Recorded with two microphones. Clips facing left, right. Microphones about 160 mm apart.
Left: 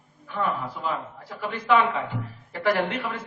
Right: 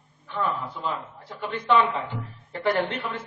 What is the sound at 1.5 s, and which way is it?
A woman's voice, 30° right (ahead or behind).